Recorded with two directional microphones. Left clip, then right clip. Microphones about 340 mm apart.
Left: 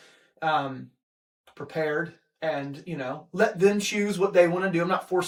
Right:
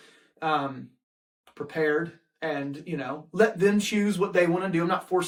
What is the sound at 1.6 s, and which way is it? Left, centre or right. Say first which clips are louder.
Speech: right 2 dB; centre.